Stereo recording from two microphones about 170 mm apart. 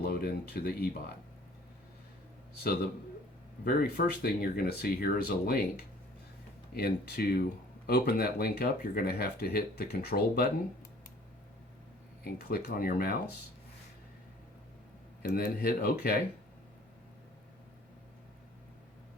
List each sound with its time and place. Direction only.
0.0 s speech: 65° left (ahead or behind)
3.6 s speech: 60° left (ahead or behind)
12.2 s speech: 65° left (ahead or behind)
15.2 s speech: 65° left (ahead or behind)